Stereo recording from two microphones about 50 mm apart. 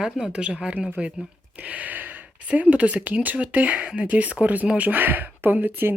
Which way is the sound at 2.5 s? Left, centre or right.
Right.